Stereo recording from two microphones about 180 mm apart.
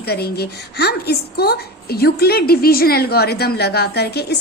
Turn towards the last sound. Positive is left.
turn(degrees=65)  # may be behind; listen again after turning